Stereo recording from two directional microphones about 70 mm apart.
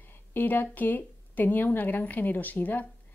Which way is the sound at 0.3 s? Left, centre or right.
Left.